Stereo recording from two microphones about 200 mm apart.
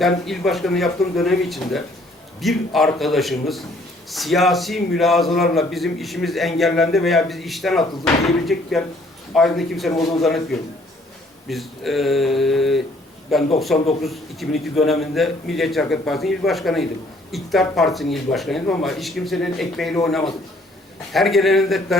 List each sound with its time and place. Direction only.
0.0 s a man's voice: centre (ahead or behind)
21.1 s a man's voice: centre (ahead or behind)